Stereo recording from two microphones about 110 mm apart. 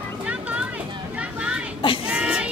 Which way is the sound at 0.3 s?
10° right (ahead or behind).